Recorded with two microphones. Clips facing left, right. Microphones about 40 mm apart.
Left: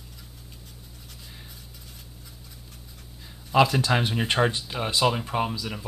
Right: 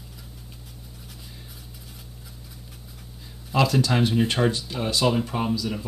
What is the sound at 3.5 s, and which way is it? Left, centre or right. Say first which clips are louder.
Speech: left 1 dB; centre.